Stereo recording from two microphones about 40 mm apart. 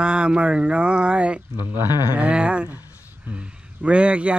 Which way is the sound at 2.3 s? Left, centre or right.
Right.